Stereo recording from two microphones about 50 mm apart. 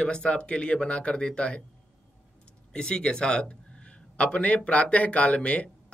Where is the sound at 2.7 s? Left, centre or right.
Centre.